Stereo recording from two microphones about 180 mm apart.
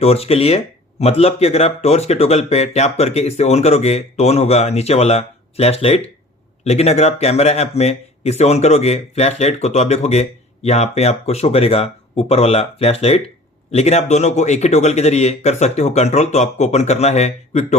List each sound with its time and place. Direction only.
0.0 s speech: 35° left (ahead or behind)